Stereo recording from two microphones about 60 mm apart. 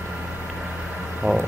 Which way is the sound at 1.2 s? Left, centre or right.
Right.